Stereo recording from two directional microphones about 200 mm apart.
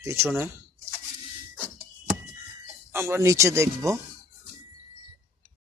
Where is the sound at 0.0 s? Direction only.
15° right (ahead or behind).